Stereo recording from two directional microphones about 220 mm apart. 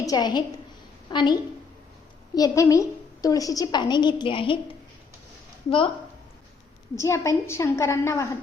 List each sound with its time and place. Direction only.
0.0 s a woman's voice: 20° left (ahead or behind)
6.9 s a woman's voice: 15° left (ahead or behind)